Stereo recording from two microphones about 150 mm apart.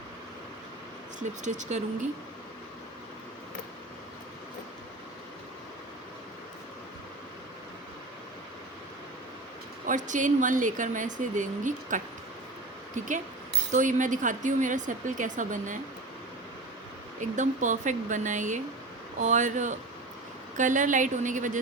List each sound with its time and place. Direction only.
1.5 s speech: 55° right (ahead or behind)
9.8 s a woman's voice: 55° right (ahead or behind)
13.7 s a woman's voice: 55° right (ahead or behind)
17.2 s a woman's voice: 55° right (ahead or behind)